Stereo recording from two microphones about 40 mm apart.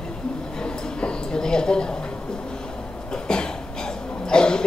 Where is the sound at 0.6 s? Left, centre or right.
Centre.